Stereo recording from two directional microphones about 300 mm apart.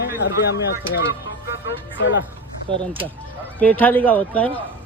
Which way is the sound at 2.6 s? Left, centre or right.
Centre.